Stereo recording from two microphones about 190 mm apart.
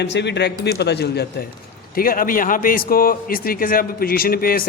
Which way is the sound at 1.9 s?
50° left (ahead or behind).